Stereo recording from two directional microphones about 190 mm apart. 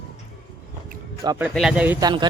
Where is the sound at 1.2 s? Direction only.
20° right (ahead or behind).